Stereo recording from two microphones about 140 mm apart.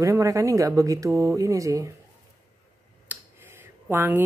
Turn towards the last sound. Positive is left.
turn(degrees=-15)  # may be behind; listen again after turning